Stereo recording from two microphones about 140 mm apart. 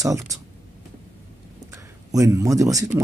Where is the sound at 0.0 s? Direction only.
25° right (ahead or behind).